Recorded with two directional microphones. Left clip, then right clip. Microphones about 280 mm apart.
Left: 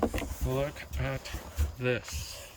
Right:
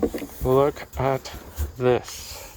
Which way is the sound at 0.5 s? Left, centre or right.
Centre.